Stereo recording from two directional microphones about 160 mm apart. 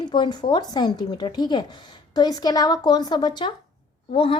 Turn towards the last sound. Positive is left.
turn(degrees=35)  # may be behind; listen again after turning